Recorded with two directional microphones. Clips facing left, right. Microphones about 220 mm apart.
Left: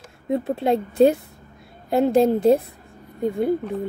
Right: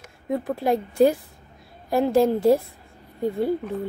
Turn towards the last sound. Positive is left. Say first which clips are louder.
# left 2 dB
turn(degrees=15)  # may be behind; listen again after turning